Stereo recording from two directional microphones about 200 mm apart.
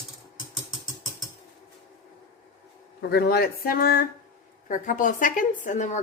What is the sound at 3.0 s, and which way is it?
A woman's voice, 50° left (ahead or behind).